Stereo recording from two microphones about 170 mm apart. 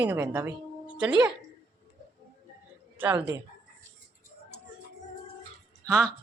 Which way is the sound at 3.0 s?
10° right (ahead or behind).